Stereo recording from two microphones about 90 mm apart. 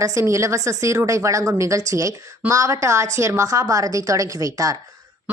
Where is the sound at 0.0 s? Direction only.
35° right (ahead or behind).